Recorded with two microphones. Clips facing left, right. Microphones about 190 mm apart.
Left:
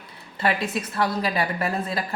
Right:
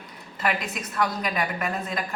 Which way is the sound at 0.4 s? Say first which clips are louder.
Left 3 dB; 30° left (ahead or behind).